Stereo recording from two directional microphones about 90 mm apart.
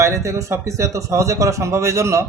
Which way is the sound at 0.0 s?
35° right (ahead or behind).